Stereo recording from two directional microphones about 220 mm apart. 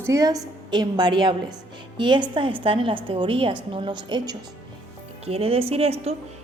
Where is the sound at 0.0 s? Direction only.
15° right (ahead or behind).